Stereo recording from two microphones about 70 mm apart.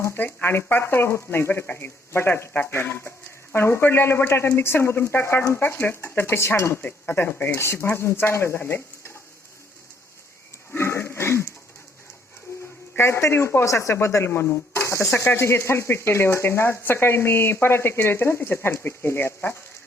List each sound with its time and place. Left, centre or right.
0.0 s speech: left
6.8 s speech: left
10.8 s a sound: left
13.0 s speech: left